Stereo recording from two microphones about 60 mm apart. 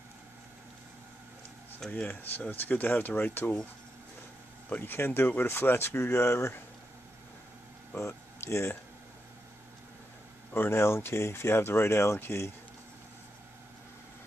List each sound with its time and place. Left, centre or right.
1.9 s speech: left
4.7 s speech: left
7.9 s speech: left
10.5 s speech: left